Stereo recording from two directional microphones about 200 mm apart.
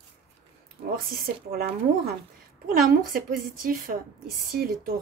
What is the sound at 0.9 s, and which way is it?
Speech, 50° right (ahead or behind).